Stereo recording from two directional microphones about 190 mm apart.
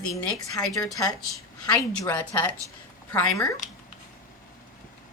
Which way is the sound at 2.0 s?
10° left (ahead or behind).